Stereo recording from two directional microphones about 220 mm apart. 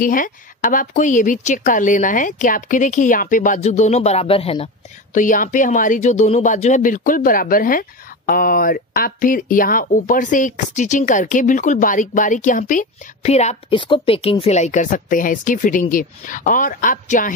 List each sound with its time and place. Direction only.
0.0 s speech: 40° left (ahead or behind)
5.1 s speech: 35° left (ahead or behind)